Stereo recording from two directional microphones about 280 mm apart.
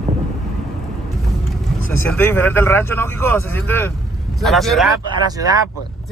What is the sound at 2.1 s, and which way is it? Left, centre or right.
Speech, centre.